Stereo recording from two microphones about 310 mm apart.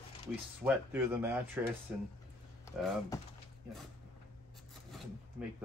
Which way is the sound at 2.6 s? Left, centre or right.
Centre.